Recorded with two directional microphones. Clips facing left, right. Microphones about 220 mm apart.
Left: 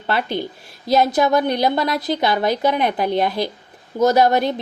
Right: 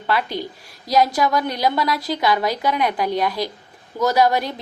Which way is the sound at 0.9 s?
25° left (ahead or behind).